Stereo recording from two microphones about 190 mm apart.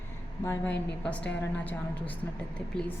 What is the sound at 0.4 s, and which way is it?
A woman's voice, 10° left (ahead or behind).